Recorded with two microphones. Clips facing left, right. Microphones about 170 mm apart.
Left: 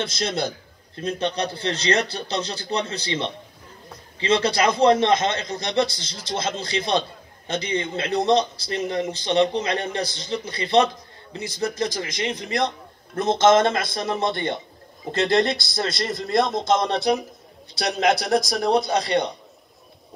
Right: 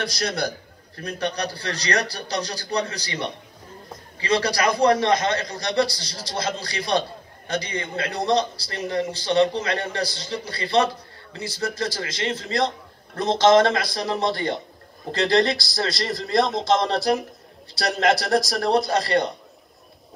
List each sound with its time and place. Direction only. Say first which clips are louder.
0.0 s a man's voice: left 1 dB; 25° left (ahead or behind)
13.7 s a man's voice: even; centre (ahead or behind)